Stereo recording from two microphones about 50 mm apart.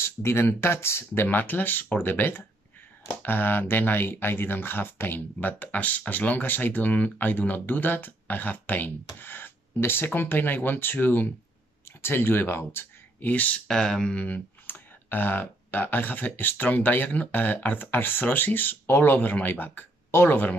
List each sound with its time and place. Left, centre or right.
0.0 s speech: left
1.2 s speech: left
13.3 s speech: left
13.7 s speech: centre
14.1 s speech: left